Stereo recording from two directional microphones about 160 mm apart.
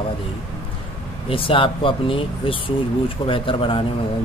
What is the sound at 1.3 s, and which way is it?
Speech, 35° left (ahead or behind).